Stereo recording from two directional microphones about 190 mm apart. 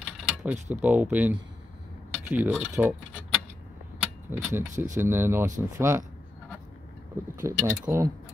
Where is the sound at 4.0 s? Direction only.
5° right (ahead or behind).